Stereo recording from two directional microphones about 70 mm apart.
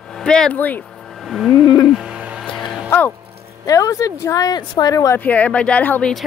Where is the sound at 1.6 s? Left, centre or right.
Left.